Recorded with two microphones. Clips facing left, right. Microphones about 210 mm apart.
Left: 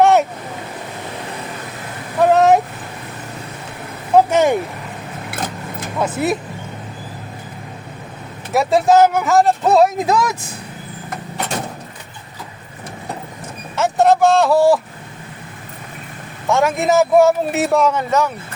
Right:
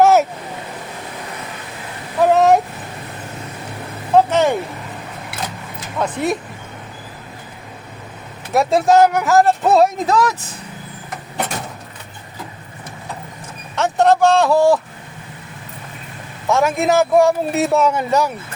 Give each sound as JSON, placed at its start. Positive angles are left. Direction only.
{"t": 0.0, "sound": "a sound", "side_deg": 0}
{"t": 2.1, "sound": "a sound", "side_deg": 0}
{"t": 4.3, "sound": "vehicle", "side_deg": 10}
{"t": 5.3, "sound": "vehicle", "side_deg": 55}
{"t": 6.0, "sound": "a man's voice", "side_deg": 5}
{"t": 8.5, "sound": "a man's voice", "side_deg": 0}
{"t": 10.1, "sound": "speech", "side_deg": 15}
{"t": 13.7, "sound": "a sound", "side_deg": 5}
{"t": 16.5, "sound": "a man's voice", "side_deg": 0}